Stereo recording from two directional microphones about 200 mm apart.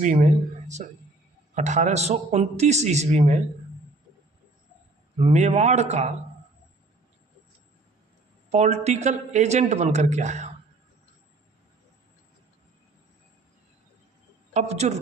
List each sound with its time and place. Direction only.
0.0 s speech: 35° right (ahead or behind)
5.2 s speech: 35° right (ahead or behind)
8.4 s speech: 35° right (ahead or behind)
14.5 s speech: 35° right (ahead or behind)